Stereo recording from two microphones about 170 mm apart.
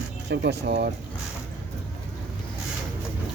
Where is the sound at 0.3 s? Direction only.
80° right.